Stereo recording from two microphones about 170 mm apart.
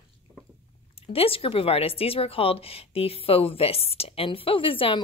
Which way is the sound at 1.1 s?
35° left (ahead or behind).